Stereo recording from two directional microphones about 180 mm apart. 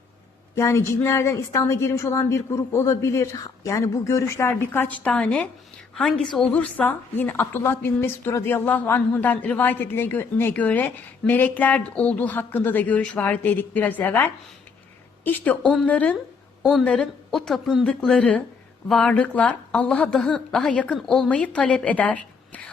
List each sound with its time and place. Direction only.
0.5 s a woman's voice: 15° left (ahead or behind)